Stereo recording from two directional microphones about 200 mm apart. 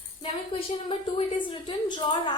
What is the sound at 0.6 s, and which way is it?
A woman's voice, 30° left (ahead or behind).